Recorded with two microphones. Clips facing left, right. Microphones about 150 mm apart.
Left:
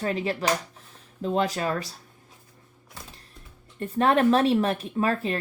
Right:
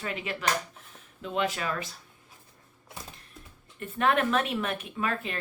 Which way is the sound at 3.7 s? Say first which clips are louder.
Left 4 dB; 35° left (ahead or behind).